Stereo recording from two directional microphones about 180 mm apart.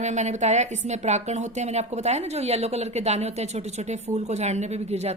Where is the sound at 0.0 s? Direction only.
40° right (ahead or behind).